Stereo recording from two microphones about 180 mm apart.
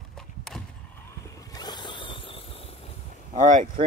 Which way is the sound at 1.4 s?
20° left (ahead or behind).